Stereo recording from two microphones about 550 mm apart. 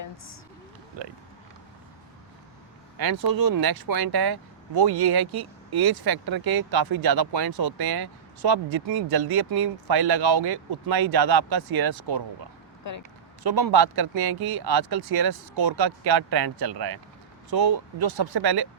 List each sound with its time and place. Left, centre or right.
3.0 s speech: right
13.5 s speech: right